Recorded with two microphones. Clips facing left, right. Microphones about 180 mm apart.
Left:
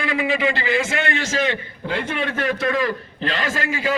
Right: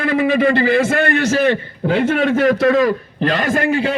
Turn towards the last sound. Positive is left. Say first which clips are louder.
# right 7 dB
turn(degrees=-65)  # may be behind; listen again after turning